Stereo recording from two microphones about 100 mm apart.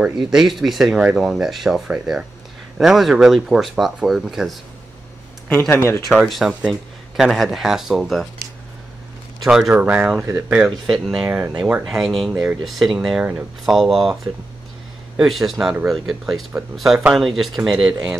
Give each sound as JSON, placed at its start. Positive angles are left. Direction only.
{"t": 0.0, "sound": "speech", "side_deg": -5}
{"t": 5.7, "sound": "speech", "side_deg": 25}
{"t": 6.0, "sound": "speech", "side_deg": 0}
{"t": 15.1, "sound": "speech", "side_deg": 0}